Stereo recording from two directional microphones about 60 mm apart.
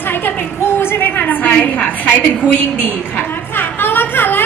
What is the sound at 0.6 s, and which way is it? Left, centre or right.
A woman's voice, left.